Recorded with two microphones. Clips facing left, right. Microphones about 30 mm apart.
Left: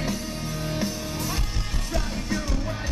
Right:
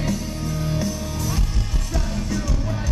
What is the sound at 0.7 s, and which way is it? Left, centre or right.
Music, left.